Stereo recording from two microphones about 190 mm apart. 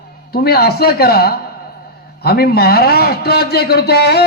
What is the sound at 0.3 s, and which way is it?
A man's voice, 55° left (ahead or behind).